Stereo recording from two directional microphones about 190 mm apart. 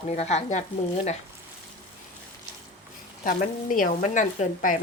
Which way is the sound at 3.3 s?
45° left (ahead or behind).